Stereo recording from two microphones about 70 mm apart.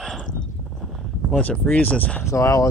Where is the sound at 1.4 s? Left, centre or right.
Left.